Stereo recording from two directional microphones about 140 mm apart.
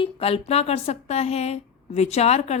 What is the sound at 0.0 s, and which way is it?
A woman's voice, 40° left (ahead or behind).